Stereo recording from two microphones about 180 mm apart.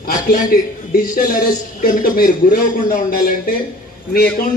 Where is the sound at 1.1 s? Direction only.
50° left (ahead or behind).